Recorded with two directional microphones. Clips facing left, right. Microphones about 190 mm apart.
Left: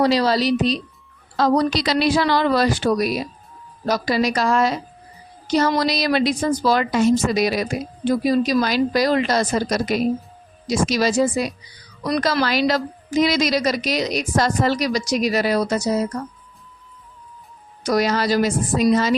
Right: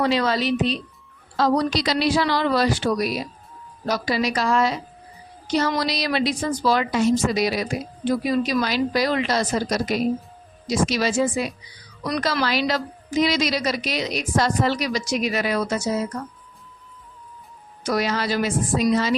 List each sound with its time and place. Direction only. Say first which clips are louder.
0.0 s a woman's voice: left 3 dB; 35° left (ahead or behind)
1.4 s a woman's voice: left 2 dB; 55° left (ahead or behind); by 16.0 s 35° left (ahead or behind)
17.8 s a woman's voice: left 4 dB; 40° left (ahead or behind)